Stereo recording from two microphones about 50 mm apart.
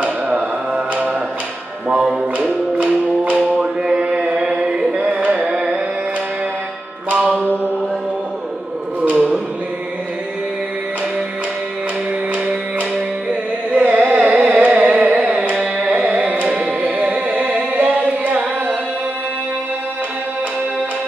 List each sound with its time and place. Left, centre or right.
0.0 s music: right
2.8 s music: right
5.5 s carnatic music: centre
7.1 s music: right
9.1 s chant: centre
13.3 s music: right
15.5 s carnatic music: right